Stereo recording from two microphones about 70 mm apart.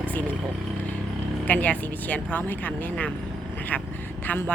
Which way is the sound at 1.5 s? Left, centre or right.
Left.